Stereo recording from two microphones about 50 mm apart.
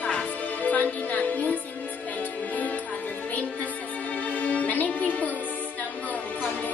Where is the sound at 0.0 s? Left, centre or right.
Left.